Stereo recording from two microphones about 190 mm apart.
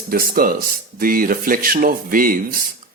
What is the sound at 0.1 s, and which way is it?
Speech, 50° right (ahead or behind).